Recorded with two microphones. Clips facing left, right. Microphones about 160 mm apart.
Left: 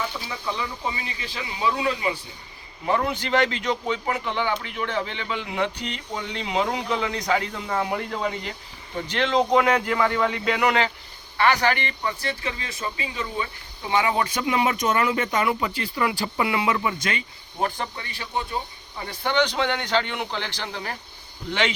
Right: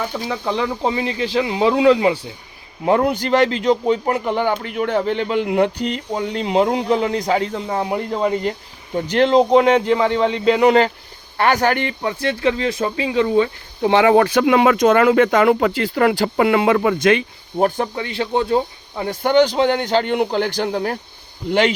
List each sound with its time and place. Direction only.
0.1 s speech: 55° right (ahead or behind); by 2.1 s 90° right
3.0 s speech: 40° right (ahead or behind)
7.7 s speech: 20° right (ahead or behind)
8.1 s speech: 35° right (ahead or behind)